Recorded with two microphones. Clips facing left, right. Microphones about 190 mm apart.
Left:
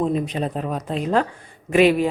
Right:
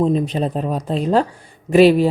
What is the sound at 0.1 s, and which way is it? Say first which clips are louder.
Speech: right 4 dB; 30° right (ahead or behind).